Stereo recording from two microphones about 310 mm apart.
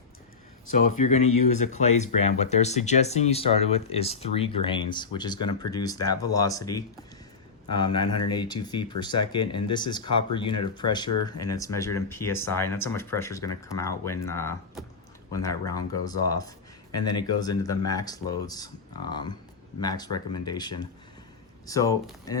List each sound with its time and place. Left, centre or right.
0.7 s speech: left